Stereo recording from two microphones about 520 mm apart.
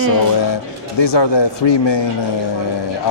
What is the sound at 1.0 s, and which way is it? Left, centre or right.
Speech, left.